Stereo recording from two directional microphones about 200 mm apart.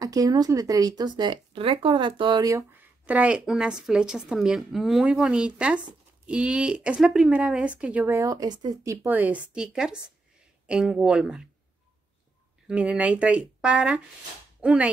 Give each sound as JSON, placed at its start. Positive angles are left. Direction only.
{"t": 0.0, "sound": "speech", "side_deg": -15}
{"t": 3.1, "sound": "speech", "side_deg": -5}
{"t": 12.6, "sound": "speech", "side_deg": -5}